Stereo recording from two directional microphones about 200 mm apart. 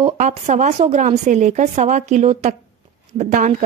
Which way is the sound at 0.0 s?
30° right (ahead or behind).